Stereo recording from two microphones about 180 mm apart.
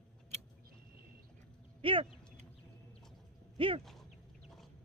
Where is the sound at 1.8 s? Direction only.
30° right (ahead or behind).